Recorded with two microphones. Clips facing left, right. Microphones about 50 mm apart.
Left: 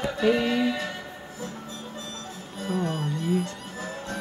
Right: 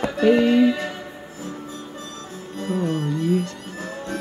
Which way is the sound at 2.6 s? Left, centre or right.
Centre.